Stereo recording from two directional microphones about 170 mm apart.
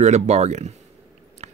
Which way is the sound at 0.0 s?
40° right (ahead or behind).